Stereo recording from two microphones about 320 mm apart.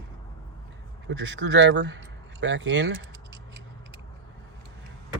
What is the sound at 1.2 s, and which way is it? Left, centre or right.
Speech, right.